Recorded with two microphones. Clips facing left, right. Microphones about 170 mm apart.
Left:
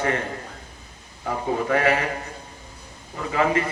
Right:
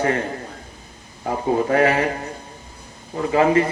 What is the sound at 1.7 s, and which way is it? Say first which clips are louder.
Speech: right 3 dB; 35° right (ahead or behind).